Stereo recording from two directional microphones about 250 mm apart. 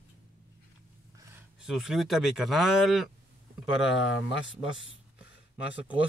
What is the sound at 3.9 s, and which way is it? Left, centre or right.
Speech, left.